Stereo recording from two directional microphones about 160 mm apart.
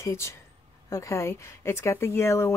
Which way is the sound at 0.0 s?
15° left (ahead or behind).